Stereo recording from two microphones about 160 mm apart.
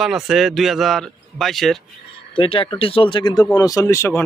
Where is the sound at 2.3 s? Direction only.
35° left (ahead or behind); by 4.2 s 15° left (ahead or behind).